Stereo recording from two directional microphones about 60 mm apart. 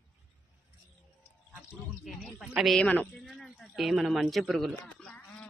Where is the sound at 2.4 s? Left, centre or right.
Centre.